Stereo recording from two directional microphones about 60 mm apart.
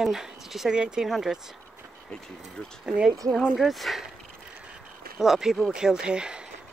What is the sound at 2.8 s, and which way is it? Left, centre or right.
Speech, centre.